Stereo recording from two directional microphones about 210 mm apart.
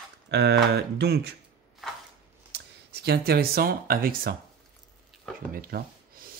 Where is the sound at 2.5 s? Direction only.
50° right (ahead or behind).